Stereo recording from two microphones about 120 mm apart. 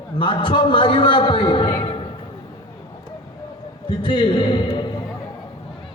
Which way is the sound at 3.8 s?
45° left (ahead or behind).